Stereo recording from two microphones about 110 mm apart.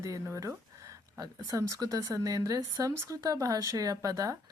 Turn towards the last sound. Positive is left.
turn(degrees=-30)  # may be behind; listen again after turning